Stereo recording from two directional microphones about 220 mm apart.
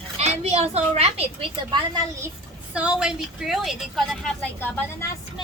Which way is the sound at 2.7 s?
5° right (ahead or behind).